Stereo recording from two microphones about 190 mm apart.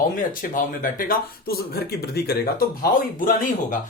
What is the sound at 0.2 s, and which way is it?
Speech, 45° left (ahead or behind).